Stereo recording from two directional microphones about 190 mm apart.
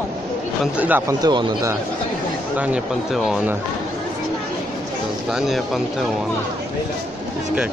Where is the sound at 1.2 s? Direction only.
20° right (ahead or behind).